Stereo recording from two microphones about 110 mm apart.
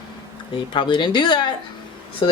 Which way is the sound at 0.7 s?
45° left (ahead or behind).